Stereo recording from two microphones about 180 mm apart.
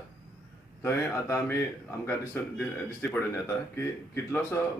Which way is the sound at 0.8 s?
10° left (ahead or behind).